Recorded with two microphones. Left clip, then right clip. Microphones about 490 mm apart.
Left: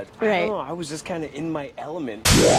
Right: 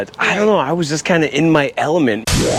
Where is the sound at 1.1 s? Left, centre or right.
Right.